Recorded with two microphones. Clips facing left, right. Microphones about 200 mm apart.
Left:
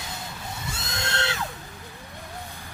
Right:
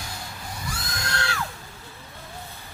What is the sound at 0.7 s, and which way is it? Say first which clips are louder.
Crowd: even; 25° left (ahead or behind).